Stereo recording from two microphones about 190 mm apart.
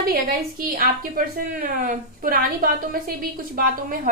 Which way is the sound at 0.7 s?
50° right (ahead or behind).